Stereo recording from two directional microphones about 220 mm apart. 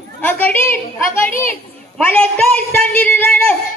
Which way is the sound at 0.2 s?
10° left (ahead or behind).